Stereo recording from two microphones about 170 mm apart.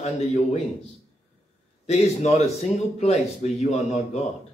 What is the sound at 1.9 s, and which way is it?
Speech, 40° left (ahead or behind).